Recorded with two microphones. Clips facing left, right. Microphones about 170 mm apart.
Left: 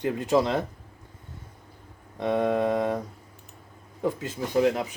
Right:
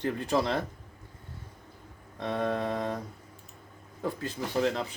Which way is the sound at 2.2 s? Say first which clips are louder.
Left 6 dB; 15° left (ahead or behind).